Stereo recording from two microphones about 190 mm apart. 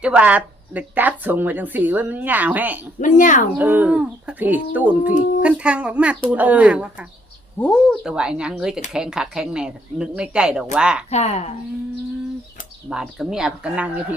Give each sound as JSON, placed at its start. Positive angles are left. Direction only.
{"t": 0.0, "sound": "a woman's voice", "side_deg": -5}
{"t": 3.0, "sound": "speech", "side_deg": 40}
{"t": 3.6, "sound": "a woman's voice", "side_deg": -10}
{"t": 5.1, "sound": "speech", "side_deg": 40}
{"t": 5.4, "sound": "a woman's voice", "side_deg": -5}
{"t": 7.6, "sound": "speech", "side_deg": 10}
{"t": 8.0, "sound": "speech", "side_deg": -5}
{"t": 11.1, "sound": "speech", "side_deg": 35}
{"t": 12.9, "sound": "speech", "side_deg": -5}